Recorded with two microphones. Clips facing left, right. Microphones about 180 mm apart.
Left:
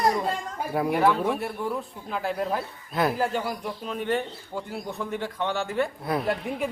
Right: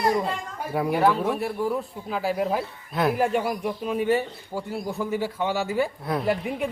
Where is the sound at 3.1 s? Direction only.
10° right (ahead or behind).